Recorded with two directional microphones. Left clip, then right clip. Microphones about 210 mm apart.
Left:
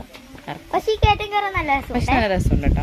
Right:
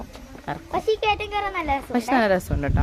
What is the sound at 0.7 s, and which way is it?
Speech, 50° left (ahead or behind).